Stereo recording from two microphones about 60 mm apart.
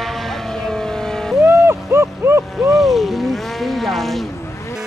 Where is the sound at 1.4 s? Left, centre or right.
Right.